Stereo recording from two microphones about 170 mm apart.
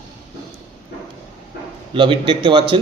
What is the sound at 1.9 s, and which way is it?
Speech, 30° right (ahead or behind).